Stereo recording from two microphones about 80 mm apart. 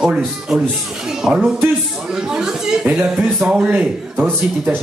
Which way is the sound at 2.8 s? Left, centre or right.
Centre.